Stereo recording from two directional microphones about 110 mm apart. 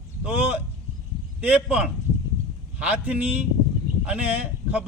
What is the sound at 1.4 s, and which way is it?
Speech, 15° right (ahead or behind).